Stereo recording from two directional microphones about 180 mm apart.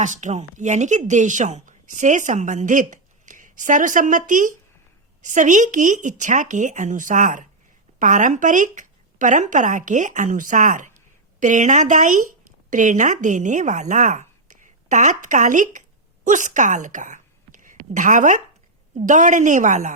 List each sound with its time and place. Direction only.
0.0 s a woman's voice: 45° right (ahead or behind)